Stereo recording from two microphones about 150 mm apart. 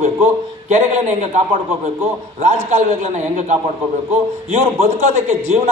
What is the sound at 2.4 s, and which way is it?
Speech, 50° right (ahead or behind).